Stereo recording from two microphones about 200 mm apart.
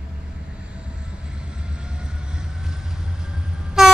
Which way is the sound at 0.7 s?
5° right (ahead or behind).